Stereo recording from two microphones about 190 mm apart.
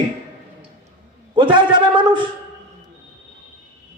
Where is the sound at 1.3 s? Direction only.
25° right (ahead or behind).